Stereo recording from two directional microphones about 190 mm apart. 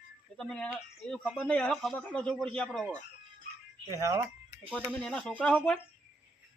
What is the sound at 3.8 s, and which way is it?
Speech, 15° right (ahead or behind).